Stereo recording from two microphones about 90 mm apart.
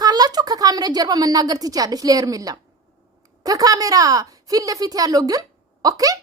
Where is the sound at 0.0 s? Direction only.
45° right (ahead or behind).